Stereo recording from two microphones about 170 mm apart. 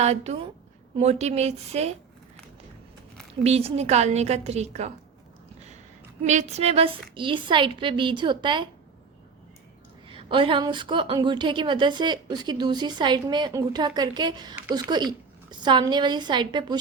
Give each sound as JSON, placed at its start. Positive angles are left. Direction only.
{"t": 0.0, "sound": "a woman's voice", "side_deg": -40}
{"t": 3.4, "sound": "a woman's voice", "side_deg": -40}
{"t": 6.2, "sound": "a woman's voice", "side_deg": -45}
{"t": 10.1, "sound": "a woman's voice", "side_deg": -30}